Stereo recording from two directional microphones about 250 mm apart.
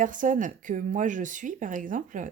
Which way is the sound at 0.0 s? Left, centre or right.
Right.